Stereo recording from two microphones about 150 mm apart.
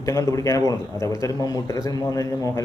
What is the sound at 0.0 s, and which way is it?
A man's voice, 20° left (ahead or behind).